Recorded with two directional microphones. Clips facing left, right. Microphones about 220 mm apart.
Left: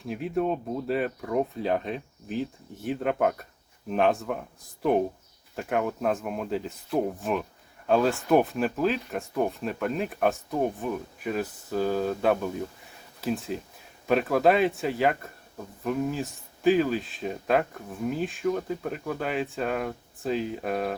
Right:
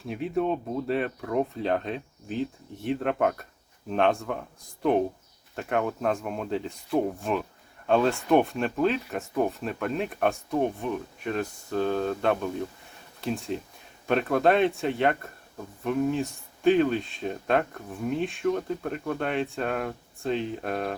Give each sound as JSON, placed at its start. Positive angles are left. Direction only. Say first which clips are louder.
{"t": 0.1, "sound": "speech", "louder": "even", "side_deg": 0}